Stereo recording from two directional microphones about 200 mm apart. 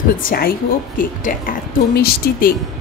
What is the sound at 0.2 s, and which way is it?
Speech, 45° left (ahead or behind).